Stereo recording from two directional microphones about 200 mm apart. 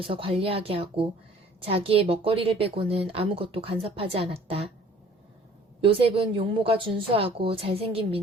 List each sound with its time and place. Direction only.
0.0 s a woman's voice: 25° right (ahead or behind)
5.8 s a woman's voice: 25° right (ahead or behind)